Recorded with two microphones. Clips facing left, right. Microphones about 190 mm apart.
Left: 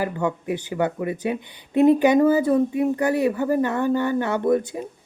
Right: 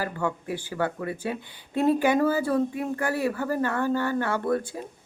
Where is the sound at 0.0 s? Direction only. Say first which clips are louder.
Left 5 dB; 20° left (ahead or behind).